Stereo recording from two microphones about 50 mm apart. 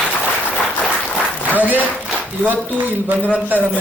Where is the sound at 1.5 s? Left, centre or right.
Right.